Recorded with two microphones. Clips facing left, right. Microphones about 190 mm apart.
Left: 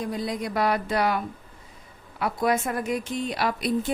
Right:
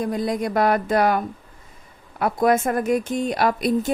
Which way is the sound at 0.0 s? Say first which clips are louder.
Right 6 dB; 50° right (ahead or behind).